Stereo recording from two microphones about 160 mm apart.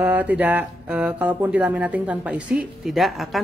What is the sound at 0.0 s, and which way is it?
A woman's voice, 10° right (ahead or behind).